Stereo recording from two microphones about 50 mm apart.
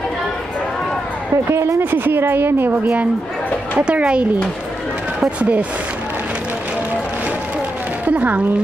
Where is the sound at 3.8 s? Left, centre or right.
Right.